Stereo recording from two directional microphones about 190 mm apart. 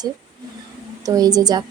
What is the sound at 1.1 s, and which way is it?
Speech, 20° right (ahead or behind).